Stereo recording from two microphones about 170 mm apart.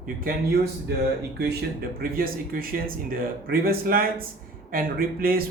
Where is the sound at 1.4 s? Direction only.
70° right (ahead or behind).